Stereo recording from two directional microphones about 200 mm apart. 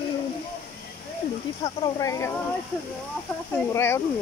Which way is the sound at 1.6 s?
15° left (ahead or behind).